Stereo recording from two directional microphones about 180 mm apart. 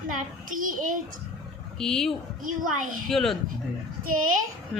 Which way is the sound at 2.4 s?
50° right (ahead or behind).